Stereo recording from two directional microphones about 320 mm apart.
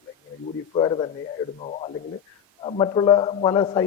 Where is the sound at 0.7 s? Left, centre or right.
Centre.